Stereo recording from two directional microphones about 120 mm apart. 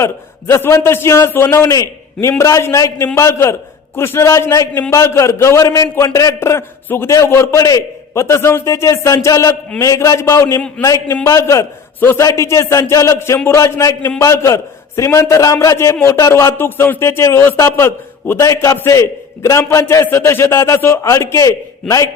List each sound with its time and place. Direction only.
0.0 s a man's voice: 25° left (ahead or behind)